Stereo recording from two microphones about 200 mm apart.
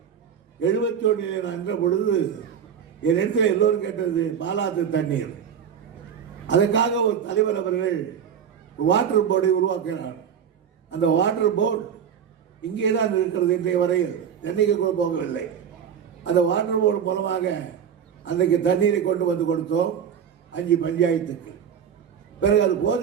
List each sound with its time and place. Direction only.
0.6 s a man's voice: 65° left (ahead or behind)
6.5 s a man's voice: 65° left (ahead or behind)
8.9 s a man's voice: 65° left (ahead or behind)
12.7 s a man's voice: 65° left (ahead or behind)
16.2 s a man's voice: 65° left (ahead or behind)
22.4 s a man's voice: 65° left (ahead or behind)